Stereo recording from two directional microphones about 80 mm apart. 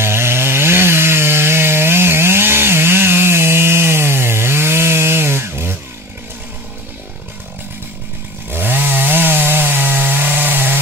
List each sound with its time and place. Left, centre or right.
0.0 s chainsaw: right
8.5 s chainsaw: right